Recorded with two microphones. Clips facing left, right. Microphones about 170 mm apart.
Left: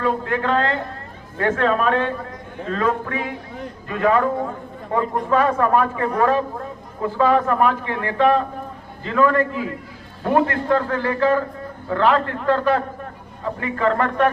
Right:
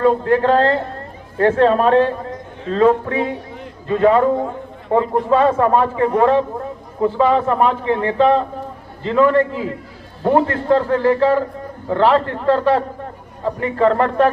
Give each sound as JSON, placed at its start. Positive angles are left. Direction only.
{"t": 0.0, "sound": "a man's voice", "side_deg": -35}